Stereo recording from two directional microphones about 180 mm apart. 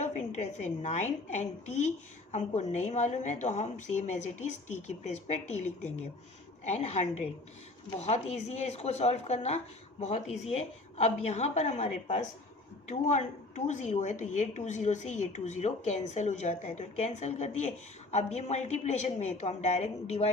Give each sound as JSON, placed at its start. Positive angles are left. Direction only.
{"t": 0.0, "sound": "a woman's voice", "side_deg": 40}